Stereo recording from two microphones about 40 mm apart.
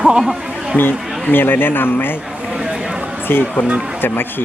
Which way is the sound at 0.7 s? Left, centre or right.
Left.